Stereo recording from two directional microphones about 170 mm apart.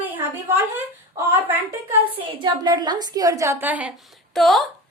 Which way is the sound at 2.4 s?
25° right (ahead or behind).